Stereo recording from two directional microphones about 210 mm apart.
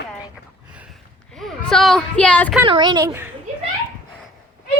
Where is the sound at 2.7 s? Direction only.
20° right (ahead or behind).